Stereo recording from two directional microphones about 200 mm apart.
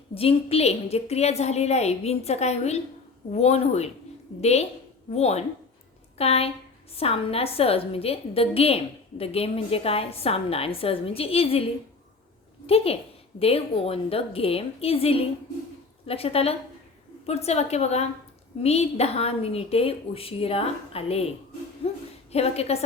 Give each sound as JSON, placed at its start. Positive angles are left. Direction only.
{"t": 0.1, "sound": "a woman's voice", "side_deg": 30}
{"t": 12.6, "sound": "a woman's voice", "side_deg": 30}
{"t": 21.8, "sound": "a sound", "side_deg": 30}
{"t": 22.3, "sound": "a woman's voice", "side_deg": 30}